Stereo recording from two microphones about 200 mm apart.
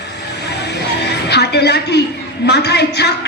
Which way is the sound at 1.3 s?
55° left (ahead or behind).